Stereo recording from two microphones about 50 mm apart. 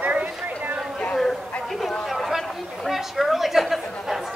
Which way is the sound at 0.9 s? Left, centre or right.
Centre.